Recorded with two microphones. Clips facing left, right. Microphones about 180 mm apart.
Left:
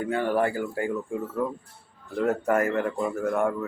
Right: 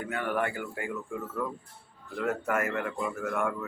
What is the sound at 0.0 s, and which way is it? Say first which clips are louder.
A man's voice: left 6 dB; 30° left (ahead or behind).